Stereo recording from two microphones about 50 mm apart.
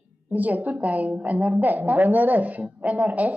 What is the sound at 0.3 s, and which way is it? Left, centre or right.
A woman's voice, right.